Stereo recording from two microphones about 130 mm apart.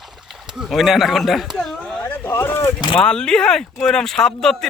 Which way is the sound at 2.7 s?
35° left (ahead or behind).